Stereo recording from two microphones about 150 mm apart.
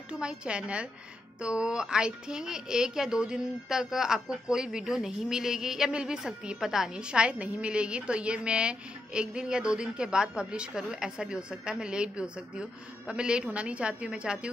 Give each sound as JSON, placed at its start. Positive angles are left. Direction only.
{"t": 0.1, "sound": "a woman's voice", "side_deg": -5}